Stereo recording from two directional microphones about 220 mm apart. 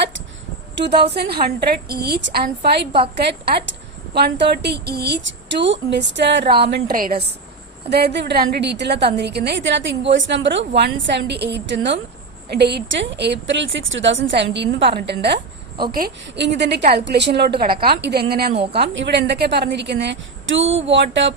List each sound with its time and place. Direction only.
0.8 s a woman's voice: 50° right (ahead or behind)
4.1 s a woman's voice: 50° right (ahead or behind)